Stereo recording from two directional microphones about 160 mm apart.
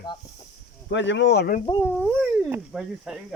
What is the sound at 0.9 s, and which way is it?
Speech, 90° left.